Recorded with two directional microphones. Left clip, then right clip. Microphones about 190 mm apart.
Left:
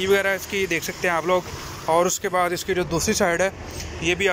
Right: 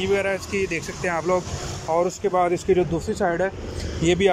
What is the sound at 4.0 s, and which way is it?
Speech, 30° right (ahead or behind).